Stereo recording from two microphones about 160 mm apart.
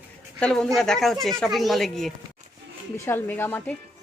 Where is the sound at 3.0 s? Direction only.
15° left (ahead or behind).